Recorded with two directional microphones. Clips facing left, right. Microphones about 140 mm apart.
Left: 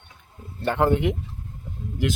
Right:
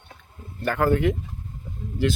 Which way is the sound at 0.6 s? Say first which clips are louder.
Even; 25° left (ahead or behind).